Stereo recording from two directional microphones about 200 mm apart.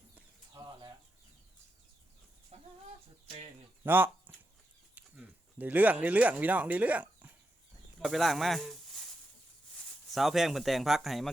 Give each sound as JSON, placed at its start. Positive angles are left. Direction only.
{"t": 0.5, "sound": "bird", "side_deg": -20}
{"t": 3.8, "sound": "speech", "side_deg": -10}
{"t": 10.1, "sound": "speech", "side_deg": 0}